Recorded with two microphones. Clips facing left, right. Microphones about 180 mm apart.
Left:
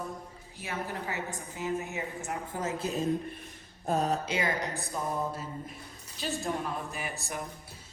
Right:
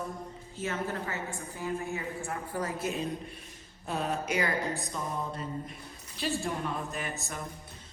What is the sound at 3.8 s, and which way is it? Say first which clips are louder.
Mantra: left 4 dB; 40° left (ahead or behind).